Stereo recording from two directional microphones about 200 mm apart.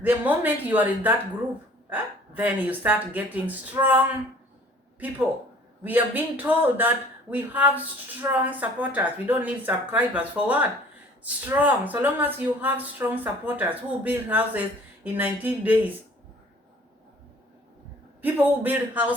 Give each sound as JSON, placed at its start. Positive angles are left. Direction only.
{"t": 0.0, "sound": "speech", "side_deg": -10}
{"t": 18.2, "sound": "speech", "side_deg": -10}